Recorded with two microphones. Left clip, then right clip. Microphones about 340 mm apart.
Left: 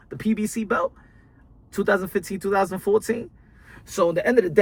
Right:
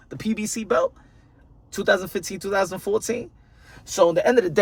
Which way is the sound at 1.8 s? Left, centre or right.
Centre.